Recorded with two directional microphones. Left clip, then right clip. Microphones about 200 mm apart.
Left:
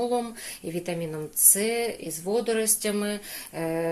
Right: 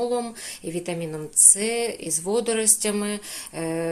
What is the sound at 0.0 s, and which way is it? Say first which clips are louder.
Speech: right 2 dB; 10° right (ahead or behind).